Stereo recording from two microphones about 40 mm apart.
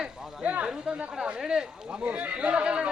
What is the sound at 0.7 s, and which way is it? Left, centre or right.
A man's voice, right.